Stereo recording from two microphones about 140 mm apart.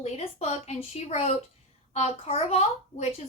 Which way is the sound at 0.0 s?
50° left (ahead or behind).